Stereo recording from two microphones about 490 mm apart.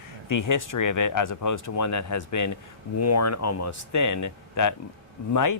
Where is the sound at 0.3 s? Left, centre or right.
Left.